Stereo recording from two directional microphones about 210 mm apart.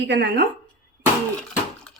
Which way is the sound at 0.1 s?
55° right (ahead or behind).